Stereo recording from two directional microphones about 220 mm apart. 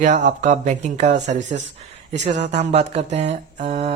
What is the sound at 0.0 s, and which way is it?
Speech, 35° right (ahead or behind).